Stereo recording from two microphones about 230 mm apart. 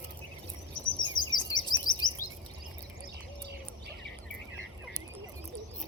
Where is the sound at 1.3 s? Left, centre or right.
Centre.